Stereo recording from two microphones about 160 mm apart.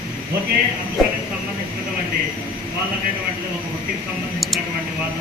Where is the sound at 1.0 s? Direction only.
Centre (ahead or behind).